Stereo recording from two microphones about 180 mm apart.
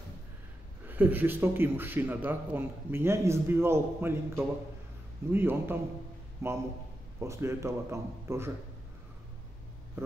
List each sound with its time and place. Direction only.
0.8 s a man's voice: 10° right (ahead or behind)